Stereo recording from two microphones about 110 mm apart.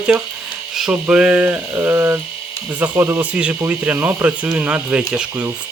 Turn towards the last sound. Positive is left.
turn(degrees=-10)  # may be behind; listen again after turning